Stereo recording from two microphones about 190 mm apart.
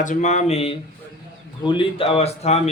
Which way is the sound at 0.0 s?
40° left (ahead or behind).